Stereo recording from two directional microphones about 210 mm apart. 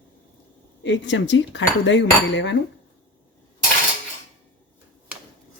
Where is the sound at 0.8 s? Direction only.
60° left (ahead or behind).